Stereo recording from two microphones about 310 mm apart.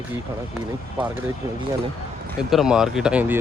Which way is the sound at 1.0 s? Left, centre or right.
Centre.